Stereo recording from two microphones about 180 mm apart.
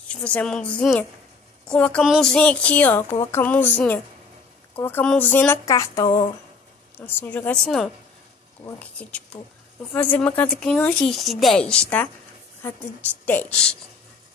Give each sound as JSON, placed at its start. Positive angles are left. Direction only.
{"t": 0.1, "sound": "a woman's voice", "side_deg": 5}
{"t": 5.7, "sound": "a sound", "side_deg": 20}
{"t": 7.0, "sound": "a woman's voice", "side_deg": 10}
{"t": 13.2, "sound": "a woman's voice", "side_deg": 10}